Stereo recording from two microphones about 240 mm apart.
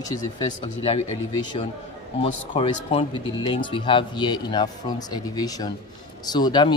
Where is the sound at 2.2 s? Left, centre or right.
Left.